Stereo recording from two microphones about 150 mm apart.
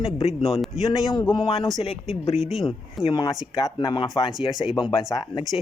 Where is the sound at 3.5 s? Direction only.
25° left (ahead or behind).